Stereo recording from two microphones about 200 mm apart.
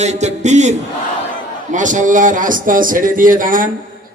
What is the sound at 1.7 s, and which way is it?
A man's voice, 40° right (ahead or behind).